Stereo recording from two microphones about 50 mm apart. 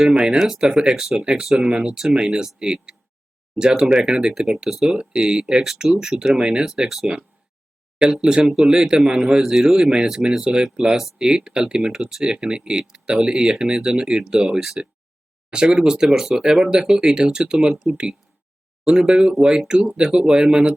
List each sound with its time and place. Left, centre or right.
0.1 s speech: centre
7.9 s speech: centre